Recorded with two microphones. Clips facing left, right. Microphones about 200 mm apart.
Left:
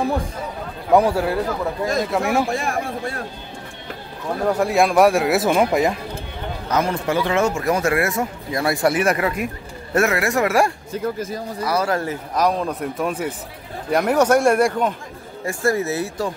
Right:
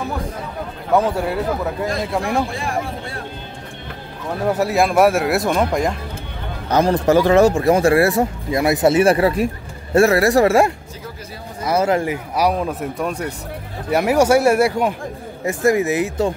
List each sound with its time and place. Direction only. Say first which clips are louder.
0.9 s speech: left 1 dB; 10° left (ahead or behind)
2.5 s speech: left 1 dB; 45° left (ahead or behind)
4.5 s speech: even; 5° right (ahead or behind)
6.7 s speech: right 6 dB; 35° right (ahead or behind)